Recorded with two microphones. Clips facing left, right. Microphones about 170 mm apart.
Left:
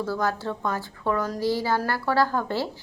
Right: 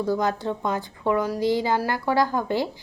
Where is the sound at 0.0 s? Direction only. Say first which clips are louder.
Right 3 dB; 20° right (ahead or behind).